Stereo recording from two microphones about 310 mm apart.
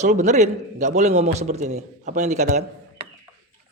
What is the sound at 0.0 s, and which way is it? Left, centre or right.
A man's voice, right.